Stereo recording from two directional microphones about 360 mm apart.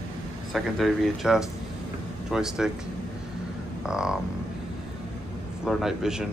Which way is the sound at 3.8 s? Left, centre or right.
Centre.